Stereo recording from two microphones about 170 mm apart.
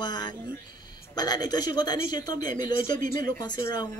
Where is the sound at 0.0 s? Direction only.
25° left (ahead or behind).